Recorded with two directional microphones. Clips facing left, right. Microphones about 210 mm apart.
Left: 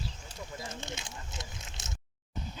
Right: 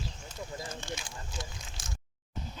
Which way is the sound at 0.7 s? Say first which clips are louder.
Right 1 dB; 20° left (ahead or behind).